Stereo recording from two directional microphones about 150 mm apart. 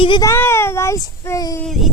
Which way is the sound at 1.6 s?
Centre (ahead or behind).